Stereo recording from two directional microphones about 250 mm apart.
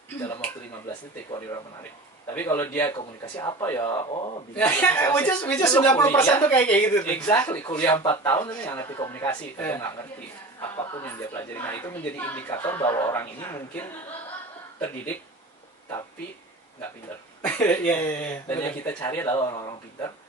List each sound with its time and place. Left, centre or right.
2.3 s speech: centre
4.0 s a man's voice: left
4.6 s speech: centre
10.8 s a man's voice: centre
11.1 s speech: centre
17.4 s speech: centre